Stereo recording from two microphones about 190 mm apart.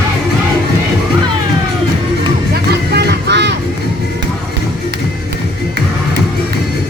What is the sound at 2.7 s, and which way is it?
Vehicle, 60° right (ahead or behind).